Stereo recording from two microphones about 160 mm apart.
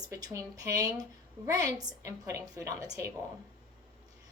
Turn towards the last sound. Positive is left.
turn(degrees=-20)  # may be behind; listen again after turning